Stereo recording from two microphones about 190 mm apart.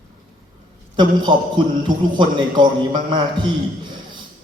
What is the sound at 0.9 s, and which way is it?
A man's voice, 25° right (ahead or behind).